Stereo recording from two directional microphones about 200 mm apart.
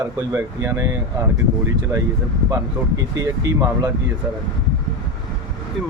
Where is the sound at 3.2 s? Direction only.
20° right (ahead or behind).